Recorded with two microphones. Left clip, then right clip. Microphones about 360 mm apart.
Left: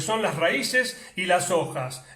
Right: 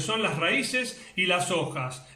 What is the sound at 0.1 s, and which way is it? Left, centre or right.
Speech, left.